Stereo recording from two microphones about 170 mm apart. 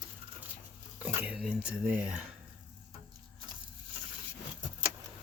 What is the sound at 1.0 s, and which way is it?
Speech, 5° right (ahead or behind).